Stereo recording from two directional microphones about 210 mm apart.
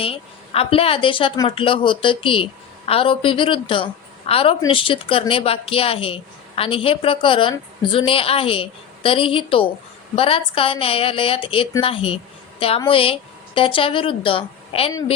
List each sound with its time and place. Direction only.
0.0 s a woman's voice: 25° left (ahead or behind)